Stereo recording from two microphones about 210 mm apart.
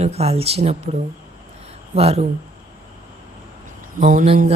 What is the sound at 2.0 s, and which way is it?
Speech, 30° right (ahead or behind).